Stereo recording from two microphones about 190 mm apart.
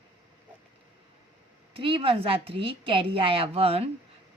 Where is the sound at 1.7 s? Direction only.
30° right (ahead or behind).